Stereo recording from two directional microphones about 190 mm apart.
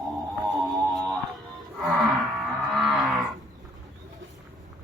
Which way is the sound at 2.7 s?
Centre (ahead or behind).